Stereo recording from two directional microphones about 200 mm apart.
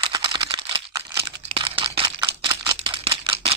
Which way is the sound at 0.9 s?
15° right (ahead or behind).